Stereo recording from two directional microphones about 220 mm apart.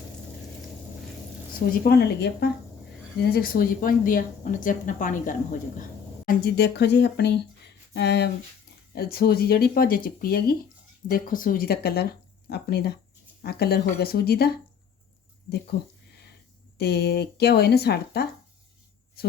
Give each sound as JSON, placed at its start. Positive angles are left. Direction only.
{"t": 1.8, "sound": "speech", "side_deg": 45}
{"t": 6.2, "sound": "speech", "side_deg": 45}
{"t": 15.7, "sound": "speech", "side_deg": 45}